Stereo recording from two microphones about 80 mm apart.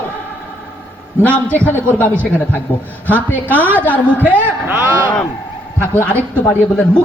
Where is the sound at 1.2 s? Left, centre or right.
Centre.